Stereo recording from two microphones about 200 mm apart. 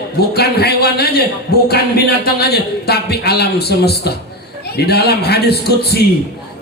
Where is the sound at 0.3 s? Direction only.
55° left (ahead or behind).